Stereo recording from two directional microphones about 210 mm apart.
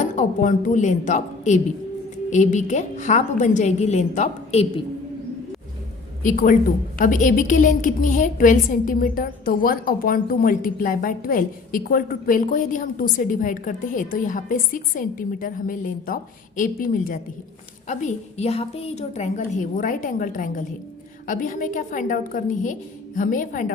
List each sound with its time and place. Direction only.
0.0 s a woman's voice: 35° left (ahead or behind)
6.2 s a woman's voice: 40° left (ahead or behind)